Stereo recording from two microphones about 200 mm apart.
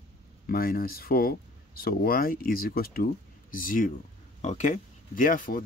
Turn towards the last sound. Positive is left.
turn(degrees=45)  # may be behind; listen again after turning